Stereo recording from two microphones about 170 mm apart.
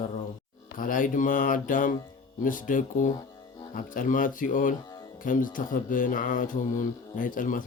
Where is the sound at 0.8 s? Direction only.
55° left (ahead or behind).